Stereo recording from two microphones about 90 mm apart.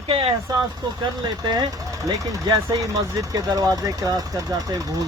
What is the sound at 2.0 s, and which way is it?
Speech, 45° right (ahead or behind).